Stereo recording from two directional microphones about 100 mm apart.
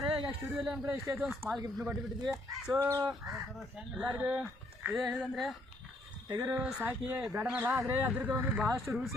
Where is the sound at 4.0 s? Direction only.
15° right (ahead or behind).